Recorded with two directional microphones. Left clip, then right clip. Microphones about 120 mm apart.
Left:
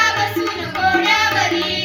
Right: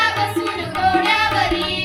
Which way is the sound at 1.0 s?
25° right (ahead or behind).